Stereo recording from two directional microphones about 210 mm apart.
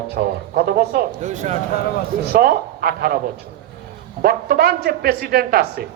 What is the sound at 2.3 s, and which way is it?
Speech, 45° right (ahead or behind).